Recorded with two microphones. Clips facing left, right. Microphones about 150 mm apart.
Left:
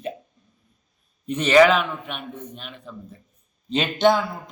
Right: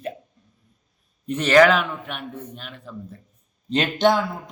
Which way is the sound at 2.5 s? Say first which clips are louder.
Even; 20° left (ahead or behind).